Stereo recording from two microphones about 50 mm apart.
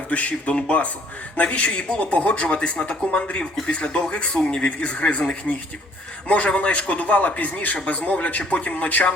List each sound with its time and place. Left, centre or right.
0.1 s speech: left